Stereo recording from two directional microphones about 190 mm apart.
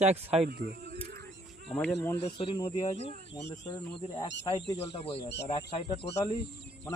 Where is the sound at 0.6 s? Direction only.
55° right (ahead or behind).